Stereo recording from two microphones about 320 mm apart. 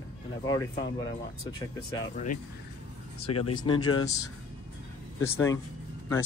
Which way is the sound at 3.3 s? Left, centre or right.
Left.